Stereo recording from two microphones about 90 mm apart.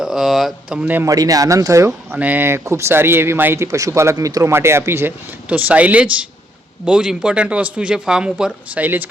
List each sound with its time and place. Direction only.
0.0 s speech: 5° right (ahead or behind)
0.8 s speech: 20° right (ahead or behind)
1.0 s speech: 40° right (ahead or behind)
2.1 s speech: 20° right (ahead or behind); by 4.5 s 40° right (ahead or behind)
4.5 s speech: 30° right (ahead or behind)
5.5 s speech: 15° right (ahead or behind)